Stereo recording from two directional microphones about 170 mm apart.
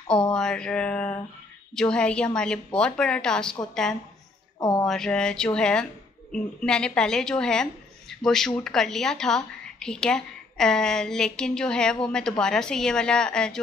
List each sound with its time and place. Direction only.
0.3 s a woman's voice: 5° left (ahead or behind)
4.6 s speech: 25° left (ahead or behind)
4.8 s a woman's voice: 5° left (ahead or behind)